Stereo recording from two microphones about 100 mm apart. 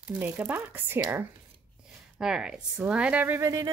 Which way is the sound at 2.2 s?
5° right (ahead or behind).